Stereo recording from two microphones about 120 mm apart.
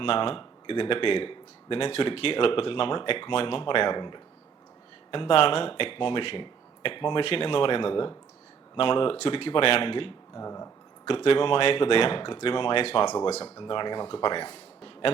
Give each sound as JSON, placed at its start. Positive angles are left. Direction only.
{"t": 0.0, "sound": "speech", "side_deg": 45}
{"t": 10.3, "sound": "speech", "side_deg": 25}
{"t": 11.0, "sound": "speech", "side_deg": 50}
{"t": 13.1, "sound": "speech", "side_deg": 35}